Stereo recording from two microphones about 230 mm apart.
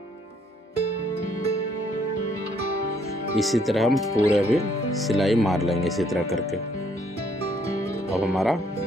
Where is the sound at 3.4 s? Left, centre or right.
Centre.